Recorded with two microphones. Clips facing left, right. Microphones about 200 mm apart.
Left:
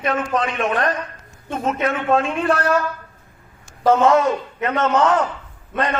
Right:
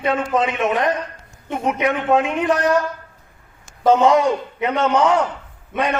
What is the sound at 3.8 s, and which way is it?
A man's voice, 15° right (ahead or behind).